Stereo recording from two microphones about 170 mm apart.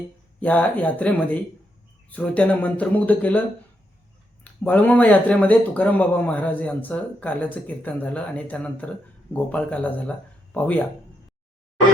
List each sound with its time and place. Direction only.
0.3 s speech: 10° left (ahead or behind)
4.4 s speech: 10° left (ahead or behind)